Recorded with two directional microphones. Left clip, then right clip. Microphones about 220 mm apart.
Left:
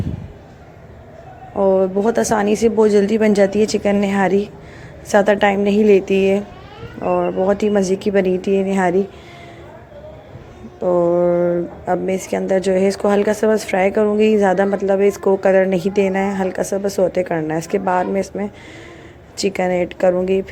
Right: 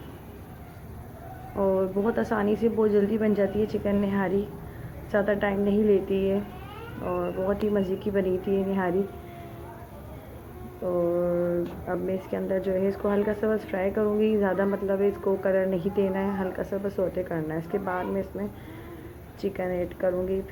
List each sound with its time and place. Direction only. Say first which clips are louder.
1.5 s speech: left 10 dB; 25° left (ahead or behind)
10.8 s speech: left 11 dB; 35° left (ahead or behind)